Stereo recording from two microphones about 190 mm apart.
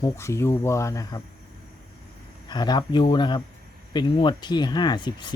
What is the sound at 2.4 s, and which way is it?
Speech, 20° left (ahead or behind).